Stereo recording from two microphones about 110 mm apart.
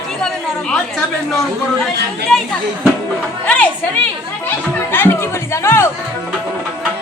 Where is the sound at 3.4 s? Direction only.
10° left (ahead or behind).